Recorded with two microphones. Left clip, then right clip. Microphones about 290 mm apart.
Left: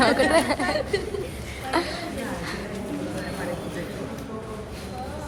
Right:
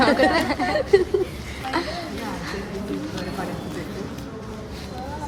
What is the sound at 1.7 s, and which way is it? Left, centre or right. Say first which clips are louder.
Speech: left 1 dB; centre.